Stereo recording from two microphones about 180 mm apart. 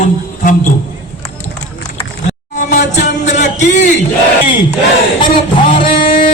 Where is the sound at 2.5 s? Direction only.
40° left (ahead or behind).